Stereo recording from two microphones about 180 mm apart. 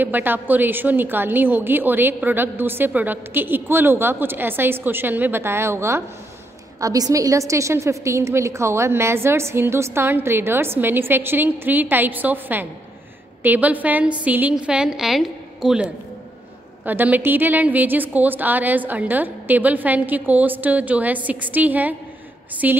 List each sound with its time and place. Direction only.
0.0 s a woman's voice: 10° right (ahead or behind)